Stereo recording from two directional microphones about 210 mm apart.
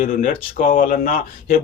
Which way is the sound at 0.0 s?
40° left (ahead or behind).